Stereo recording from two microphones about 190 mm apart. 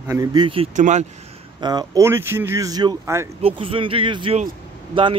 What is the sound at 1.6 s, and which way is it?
Speech, 20° right (ahead or behind).